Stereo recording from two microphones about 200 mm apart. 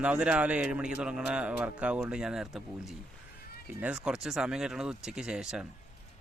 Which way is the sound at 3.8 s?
5° right (ahead or behind).